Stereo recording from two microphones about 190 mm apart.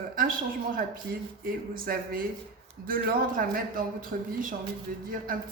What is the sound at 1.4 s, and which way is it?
A woman's voice, 50° right (ahead or behind).